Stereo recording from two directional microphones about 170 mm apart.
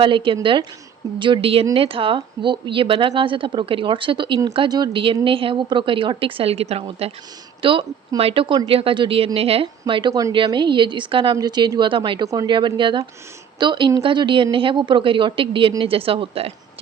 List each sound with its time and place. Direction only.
0.0 s speech: 30° right (ahead or behind)